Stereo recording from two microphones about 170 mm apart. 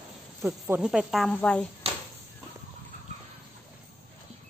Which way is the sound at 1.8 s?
35° right (ahead or behind).